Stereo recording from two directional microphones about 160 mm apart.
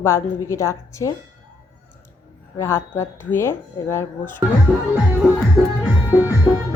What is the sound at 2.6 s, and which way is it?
Speech, 15° left (ahead or behind).